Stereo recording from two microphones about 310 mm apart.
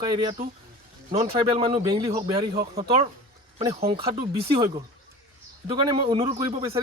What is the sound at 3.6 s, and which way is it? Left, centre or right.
Speech, centre.